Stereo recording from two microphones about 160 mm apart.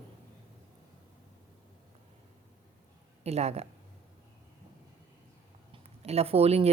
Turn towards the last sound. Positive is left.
turn(degrees=-40)  # may be behind; listen again after turning